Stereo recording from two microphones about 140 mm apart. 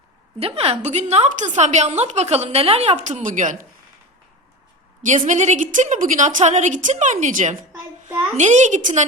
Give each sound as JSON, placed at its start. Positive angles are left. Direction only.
{"t": 0.3, "sound": "a woman's voice", "side_deg": -45}
{"t": 5.0, "sound": "a woman's voice", "side_deg": -60}